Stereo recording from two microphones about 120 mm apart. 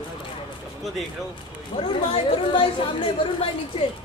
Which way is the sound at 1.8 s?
50° left (ahead or behind).